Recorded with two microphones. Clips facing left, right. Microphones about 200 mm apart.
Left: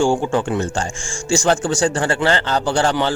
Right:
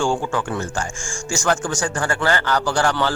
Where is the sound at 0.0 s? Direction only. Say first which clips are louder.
Left 4 dB; 20° left (ahead or behind).